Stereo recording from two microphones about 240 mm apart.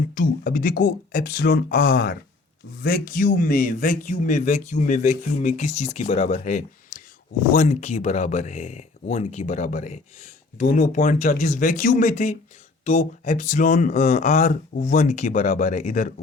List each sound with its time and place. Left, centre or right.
0.1 s speech: left